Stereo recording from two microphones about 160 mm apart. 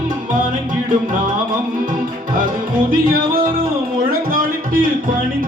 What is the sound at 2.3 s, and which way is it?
Music, 60° right (ahead or behind).